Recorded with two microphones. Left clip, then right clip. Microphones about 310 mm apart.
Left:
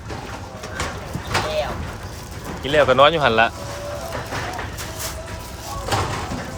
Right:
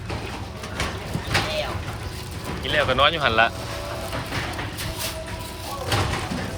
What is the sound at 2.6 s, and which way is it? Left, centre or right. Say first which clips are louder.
Speech: left 6 dB; centre.